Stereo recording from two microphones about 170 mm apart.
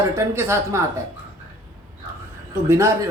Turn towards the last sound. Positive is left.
turn(degrees=-15)  # may be behind; listen again after turning